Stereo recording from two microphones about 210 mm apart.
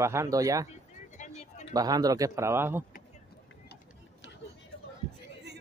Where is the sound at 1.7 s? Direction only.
20° right (ahead or behind).